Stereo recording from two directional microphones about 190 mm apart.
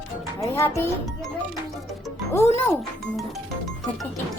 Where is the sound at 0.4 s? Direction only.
15° left (ahead or behind).